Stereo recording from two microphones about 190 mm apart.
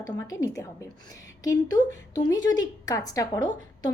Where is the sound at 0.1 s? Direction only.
20° left (ahead or behind).